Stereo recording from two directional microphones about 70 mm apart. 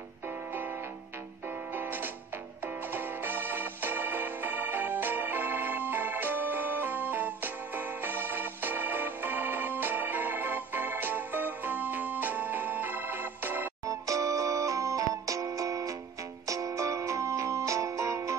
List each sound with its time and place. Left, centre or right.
1.8 s music: right
2.9 s organ: right
13.8 s music: right